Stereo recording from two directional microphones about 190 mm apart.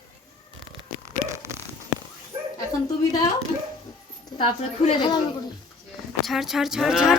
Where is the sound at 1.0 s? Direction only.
15° right (ahead or behind).